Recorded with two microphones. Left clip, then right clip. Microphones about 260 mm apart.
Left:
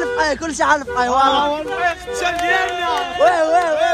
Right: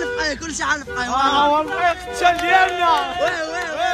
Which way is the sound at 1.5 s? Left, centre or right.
Right.